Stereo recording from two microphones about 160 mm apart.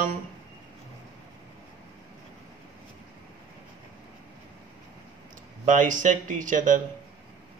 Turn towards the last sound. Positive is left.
turn(degrees=-55)  # may be behind; listen again after turning